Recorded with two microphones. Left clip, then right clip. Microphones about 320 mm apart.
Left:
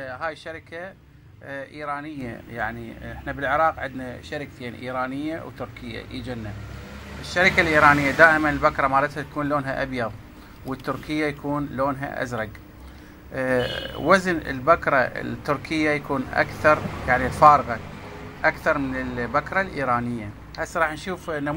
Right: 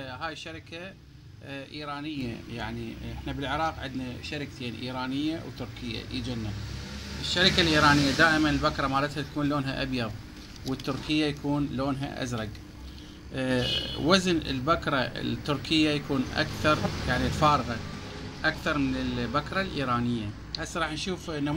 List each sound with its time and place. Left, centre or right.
0.0 s speech: centre
3.3 s speech: centre
5.9 s speech: centre
7.3 s speech: centre
11.1 s speech: centre